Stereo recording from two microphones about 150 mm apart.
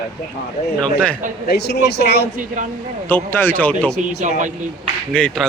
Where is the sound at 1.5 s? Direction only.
90° left.